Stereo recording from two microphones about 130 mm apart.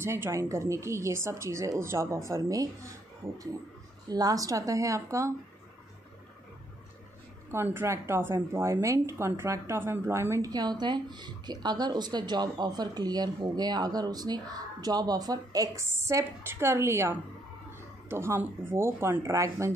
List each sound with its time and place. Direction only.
0.0 s speech: 20° right (ahead or behind)
7.5 s a woman's voice: 20° right (ahead or behind)